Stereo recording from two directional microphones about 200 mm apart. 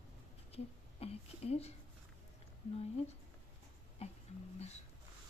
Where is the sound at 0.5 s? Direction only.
30° left (ahead or behind).